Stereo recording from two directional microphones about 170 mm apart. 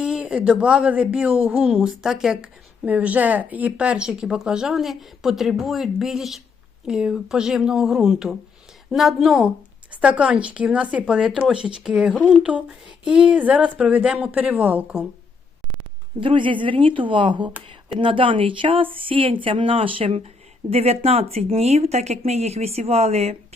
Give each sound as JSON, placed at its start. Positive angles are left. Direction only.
{"t": 0.0, "sound": "speech", "side_deg": -5}
{"t": 16.2, "sound": "speech", "side_deg": -30}